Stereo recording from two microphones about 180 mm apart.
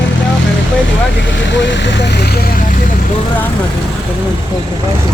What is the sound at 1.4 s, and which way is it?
Speech, 85° left.